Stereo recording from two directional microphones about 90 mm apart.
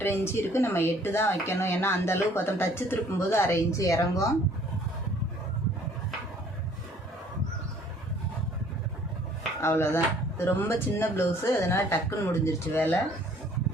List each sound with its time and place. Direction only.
0.0 s speech: 30° left (ahead or behind)
9.6 s speech: 30° left (ahead or behind)